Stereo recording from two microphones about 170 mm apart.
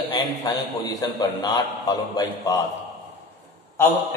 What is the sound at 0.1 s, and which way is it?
A man's voice, 20° left (ahead or behind).